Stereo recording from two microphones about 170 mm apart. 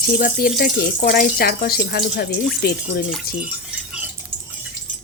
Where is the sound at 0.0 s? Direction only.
55° left (ahead or behind).